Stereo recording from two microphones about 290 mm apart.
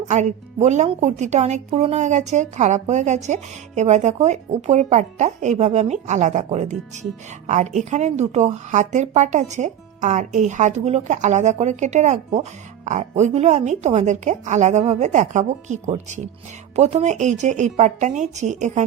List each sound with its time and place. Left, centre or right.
0.1 s speech: right